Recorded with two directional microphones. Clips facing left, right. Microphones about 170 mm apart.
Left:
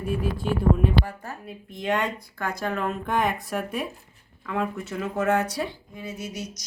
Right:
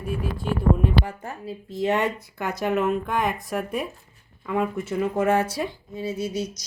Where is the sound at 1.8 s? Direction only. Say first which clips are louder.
Right 3 dB; 10° right (ahead or behind).